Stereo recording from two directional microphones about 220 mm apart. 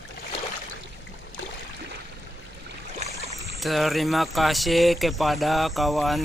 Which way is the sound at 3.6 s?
Centre (ahead or behind).